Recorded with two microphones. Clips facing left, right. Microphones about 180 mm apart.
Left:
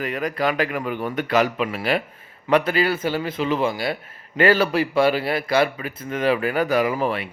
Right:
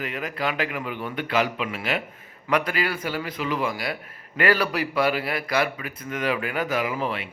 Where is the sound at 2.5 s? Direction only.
25° left (ahead or behind).